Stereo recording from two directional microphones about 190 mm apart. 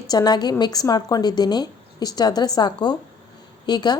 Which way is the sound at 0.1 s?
20° left (ahead or behind).